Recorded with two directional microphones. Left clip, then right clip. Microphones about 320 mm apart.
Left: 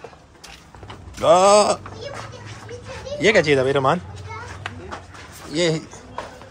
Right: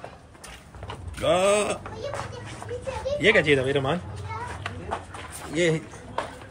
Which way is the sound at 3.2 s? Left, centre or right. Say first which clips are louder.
Left 4 dB; centre.